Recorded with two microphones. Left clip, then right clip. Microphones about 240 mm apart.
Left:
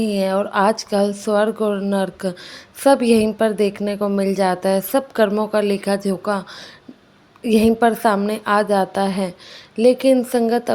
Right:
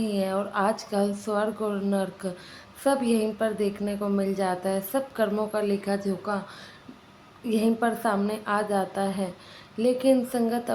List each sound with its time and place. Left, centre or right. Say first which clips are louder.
0.0 s a woman's voice: left 8 dB; left
7.4 s a woman's voice: left 10 dB; left